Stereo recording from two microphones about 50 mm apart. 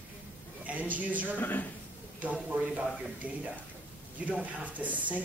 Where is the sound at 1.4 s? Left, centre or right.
Left.